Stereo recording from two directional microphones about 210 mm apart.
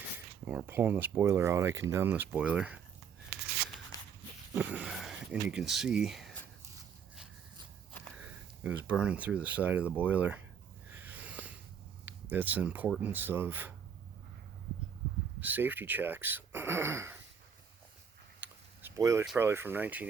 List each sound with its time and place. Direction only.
0.4 s speech: 10° right (ahead or behind)
3.9 s dog: 15° left (ahead or behind)
4.5 s speech: 5° right (ahead or behind)
8.1 s speech: 5° right (ahead or behind)
10.9 s a sound: 10° right (ahead or behind)
12.0 s speech: 10° right (ahead or behind)
15.4 s speech: 10° right (ahead or behind)
18.4 s a sound: 5° right (ahead or behind)
19.2 s speech: 5° right (ahead or behind)